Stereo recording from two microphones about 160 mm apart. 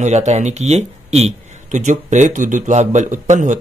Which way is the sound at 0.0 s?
45° right (ahead or behind).